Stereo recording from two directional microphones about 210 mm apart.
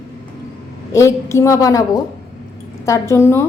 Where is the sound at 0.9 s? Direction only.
15° left (ahead or behind).